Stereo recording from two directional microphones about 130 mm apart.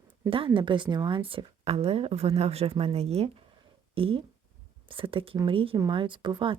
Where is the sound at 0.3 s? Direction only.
45° right (ahead or behind).